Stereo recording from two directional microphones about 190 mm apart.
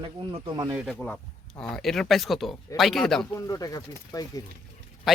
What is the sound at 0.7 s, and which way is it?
Speech, centre (ahead or behind).